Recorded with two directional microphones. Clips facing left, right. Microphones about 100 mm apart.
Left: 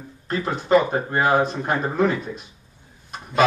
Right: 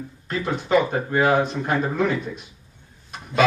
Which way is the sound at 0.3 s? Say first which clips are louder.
Left 3 dB; 35° left (ahead or behind).